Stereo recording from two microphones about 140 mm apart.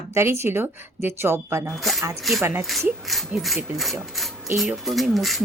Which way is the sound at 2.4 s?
20° right (ahead or behind).